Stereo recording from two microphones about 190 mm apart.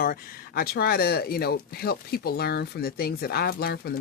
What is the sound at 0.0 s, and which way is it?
Speech, 50° left (ahead or behind).